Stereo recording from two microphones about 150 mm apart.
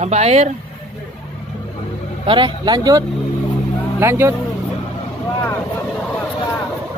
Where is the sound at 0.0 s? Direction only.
45° right (ahead or behind).